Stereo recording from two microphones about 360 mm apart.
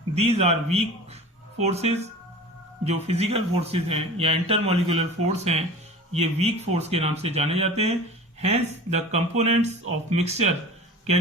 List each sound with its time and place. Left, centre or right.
0.1 s speech: centre
1.6 s speech: centre